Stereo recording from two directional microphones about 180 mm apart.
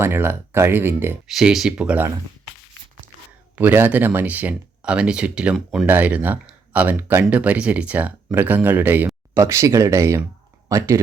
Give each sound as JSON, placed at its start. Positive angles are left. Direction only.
{"t": 0.0, "sound": "speech", "side_deg": -10}
{"t": 1.3, "sound": "speech", "side_deg": 0}
{"t": 3.5, "sound": "speech", "side_deg": -10}